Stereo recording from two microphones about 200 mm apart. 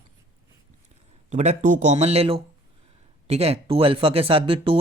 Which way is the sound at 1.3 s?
35° right (ahead or behind).